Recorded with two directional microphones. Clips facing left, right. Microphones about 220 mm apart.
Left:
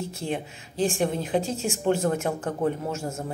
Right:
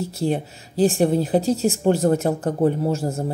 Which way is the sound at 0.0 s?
35° right (ahead or behind).